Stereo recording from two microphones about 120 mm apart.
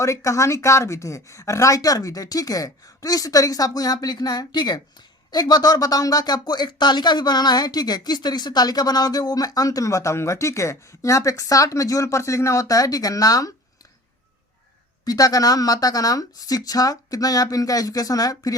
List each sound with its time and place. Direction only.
0.0 s speech: 25° left (ahead or behind)
15.0 s speech: 30° left (ahead or behind)